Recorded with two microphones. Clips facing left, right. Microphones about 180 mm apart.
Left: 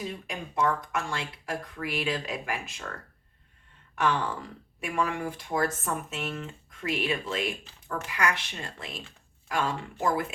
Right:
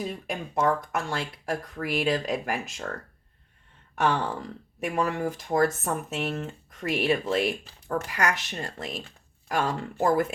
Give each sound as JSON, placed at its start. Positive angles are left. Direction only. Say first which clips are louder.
{"t": 0.0, "sound": "speech", "louder": "right 4 dB", "side_deg": -50}
{"t": 3.9, "sound": "a sound", "louder": "right 2 dB", "side_deg": -40}
{"t": 4.8, "sound": "speech", "louder": "right 3 dB", "side_deg": -45}